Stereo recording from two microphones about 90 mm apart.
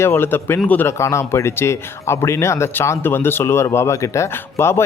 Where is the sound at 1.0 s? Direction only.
30° left (ahead or behind).